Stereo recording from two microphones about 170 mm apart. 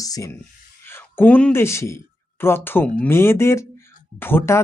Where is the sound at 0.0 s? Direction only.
20° left (ahead or behind).